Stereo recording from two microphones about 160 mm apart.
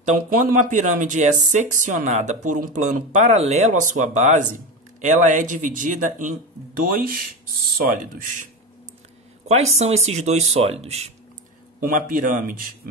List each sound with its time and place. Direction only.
0.0 s speech: 55° right (ahead or behind)
9.8 s speech: 40° right (ahead or behind)
11.8 s speech: 60° right (ahead or behind)